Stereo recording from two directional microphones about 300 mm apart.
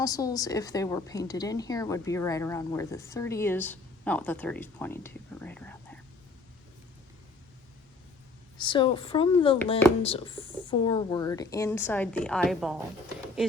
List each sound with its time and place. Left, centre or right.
0.0 s a woman's voice: centre
8.5 s a woman's voice: centre